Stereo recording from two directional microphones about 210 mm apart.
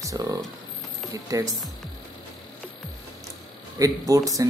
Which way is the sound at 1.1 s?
15° right (ahead or behind).